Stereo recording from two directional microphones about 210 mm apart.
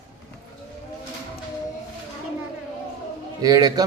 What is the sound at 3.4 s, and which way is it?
Speech, 15° right (ahead or behind).